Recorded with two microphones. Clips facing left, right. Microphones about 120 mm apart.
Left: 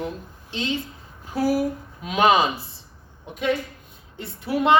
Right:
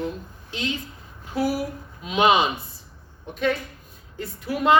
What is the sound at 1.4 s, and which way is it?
Speech, 40° left (ahead or behind).